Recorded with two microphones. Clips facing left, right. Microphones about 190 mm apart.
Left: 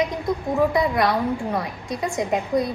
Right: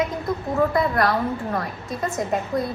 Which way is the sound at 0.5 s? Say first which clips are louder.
Even; 15° left (ahead or behind).